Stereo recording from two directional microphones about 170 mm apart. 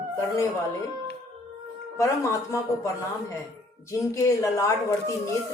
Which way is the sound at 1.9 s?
20° left (ahead or behind).